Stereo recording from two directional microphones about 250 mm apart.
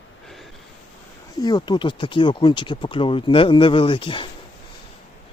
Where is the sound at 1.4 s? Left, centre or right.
Centre.